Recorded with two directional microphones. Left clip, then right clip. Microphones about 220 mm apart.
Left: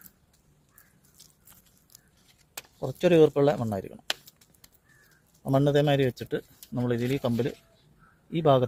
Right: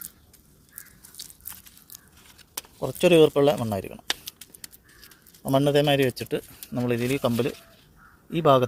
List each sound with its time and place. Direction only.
2.7 s speech: 20° right (ahead or behind)
4.0 s a sound: 5° right (ahead or behind)
5.4 s speech: 20° right (ahead or behind)